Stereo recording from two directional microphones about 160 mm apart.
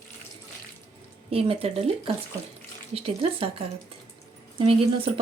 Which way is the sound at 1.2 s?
35° right (ahead or behind).